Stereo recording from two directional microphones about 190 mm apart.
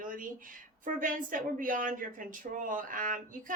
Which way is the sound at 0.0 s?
45° right (ahead or behind).